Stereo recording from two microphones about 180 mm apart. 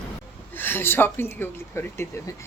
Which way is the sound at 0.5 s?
10° left (ahead or behind).